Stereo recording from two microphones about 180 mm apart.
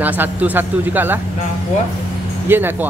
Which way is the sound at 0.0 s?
10° right (ahead or behind).